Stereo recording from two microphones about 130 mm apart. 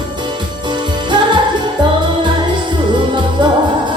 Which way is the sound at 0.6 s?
35° right (ahead or behind).